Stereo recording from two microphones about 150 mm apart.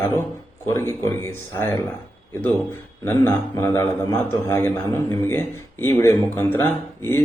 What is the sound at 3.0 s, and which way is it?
A man's voice, 15° left (ahead or behind).